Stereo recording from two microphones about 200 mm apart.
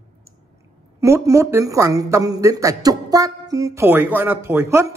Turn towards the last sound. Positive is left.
turn(degrees=-15)  # may be behind; listen again after turning